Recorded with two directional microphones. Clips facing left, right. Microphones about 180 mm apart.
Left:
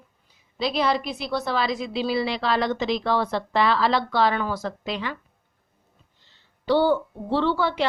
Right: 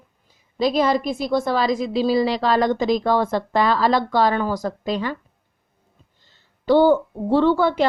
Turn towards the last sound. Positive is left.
turn(degrees=-45)  # may be behind; listen again after turning